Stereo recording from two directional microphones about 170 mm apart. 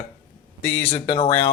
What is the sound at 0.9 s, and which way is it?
Speech, 35° left (ahead or behind).